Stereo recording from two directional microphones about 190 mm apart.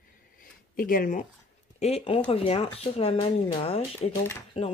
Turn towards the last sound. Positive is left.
turn(degrees=30)  # may be behind; listen again after turning